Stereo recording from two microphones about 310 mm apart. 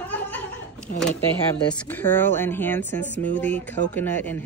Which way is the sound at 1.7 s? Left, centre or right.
Centre.